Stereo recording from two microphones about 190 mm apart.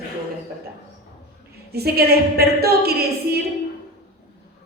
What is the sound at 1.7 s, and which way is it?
A woman's voice, 55° right (ahead or behind).